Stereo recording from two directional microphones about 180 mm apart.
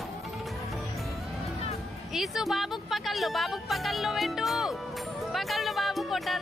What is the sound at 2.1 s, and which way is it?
Music, centre (ahead or behind).